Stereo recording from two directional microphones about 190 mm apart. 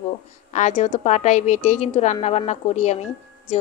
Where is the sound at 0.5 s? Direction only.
40° left (ahead or behind).